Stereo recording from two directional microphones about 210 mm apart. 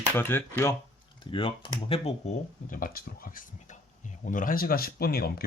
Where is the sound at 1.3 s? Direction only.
25° left (ahead or behind).